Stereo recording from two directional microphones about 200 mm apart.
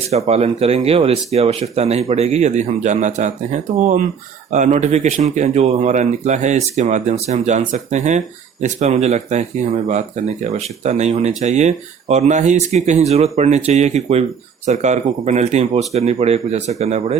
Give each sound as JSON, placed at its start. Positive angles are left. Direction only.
{"t": 0.1, "sound": "speech", "side_deg": -30}